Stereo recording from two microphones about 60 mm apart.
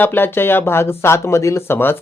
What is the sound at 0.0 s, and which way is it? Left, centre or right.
Speech, left.